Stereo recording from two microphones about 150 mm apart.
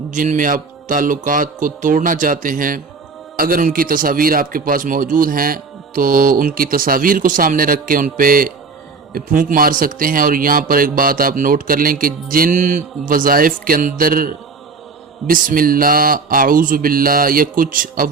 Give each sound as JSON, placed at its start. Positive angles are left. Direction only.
{"t": 0.1, "sound": "a man's voice", "side_deg": -60}